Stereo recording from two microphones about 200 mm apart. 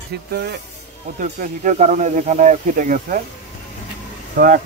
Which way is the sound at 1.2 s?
40° right (ahead or behind).